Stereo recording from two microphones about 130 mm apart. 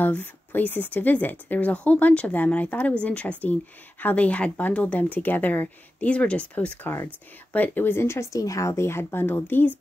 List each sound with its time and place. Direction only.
0.0 s a woman's voice: 15° left (ahead or behind)